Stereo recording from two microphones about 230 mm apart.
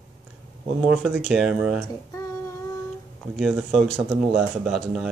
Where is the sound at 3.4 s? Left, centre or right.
Centre.